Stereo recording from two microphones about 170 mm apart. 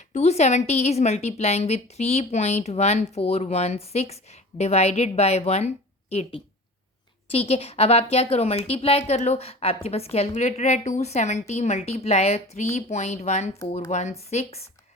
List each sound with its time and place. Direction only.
0.1 s a woman's voice: 40° left (ahead or behind)